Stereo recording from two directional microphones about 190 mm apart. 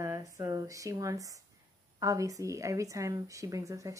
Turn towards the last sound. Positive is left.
turn(degrees=-15)  # may be behind; listen again after turning